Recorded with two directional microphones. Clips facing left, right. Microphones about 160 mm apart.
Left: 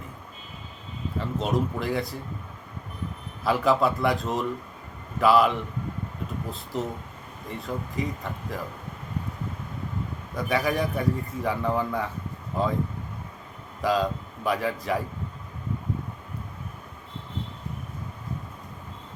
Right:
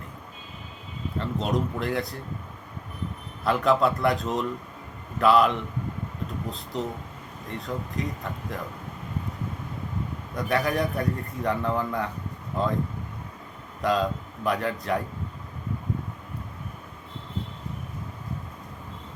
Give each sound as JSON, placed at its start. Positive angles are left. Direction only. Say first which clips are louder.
{"t": 1.2, "sound": "a man's voice", "louder": "left 1 dB", "side_deg": 0}
{"t": 3.4, "sound": "a man's voice", "louder": "even", "side_deg": 0}
{"t": 6.7, "sound": "a man's voice", "louder": "left 1 dB", "side_deg": 5}
{"t": 10.3, "sound": "a man's voice", "louder": "even", "side_deg": 0}
{"t": 13.8, "sound": "a man's voice", "louder": "even", "side_deg": 0}